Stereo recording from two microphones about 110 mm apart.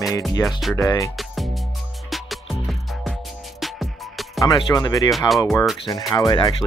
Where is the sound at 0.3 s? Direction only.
35° left (ahead or behind).